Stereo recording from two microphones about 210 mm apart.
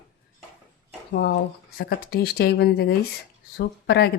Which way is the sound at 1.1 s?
55° left (ahead or behind).